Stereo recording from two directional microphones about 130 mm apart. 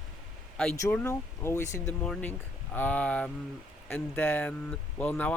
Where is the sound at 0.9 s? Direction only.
15° left (ahead or behind).